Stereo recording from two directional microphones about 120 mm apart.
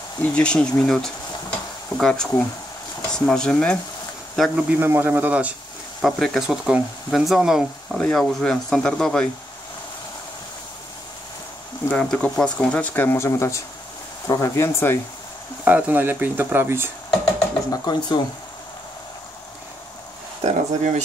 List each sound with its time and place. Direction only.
0.2 s speech: 10° left (ahead or behind)
4.4 s speech: 10° right (ahead or behind)
5.9 s speech: centre (ahead or behind)
11.9 s speech: 10° left (ahead or behind)
15.6 s speech: 15° right (ahead or behind)
17.6 s speech: 35° left (ahead or behind)
20.4 s speech: 80° right